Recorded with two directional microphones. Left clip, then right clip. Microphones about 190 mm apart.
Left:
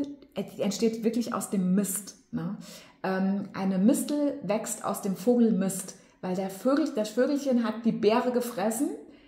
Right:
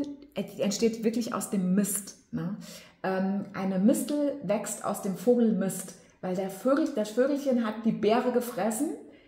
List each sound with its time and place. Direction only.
0.0 s a woman's voice: 5° right (ahead or behind)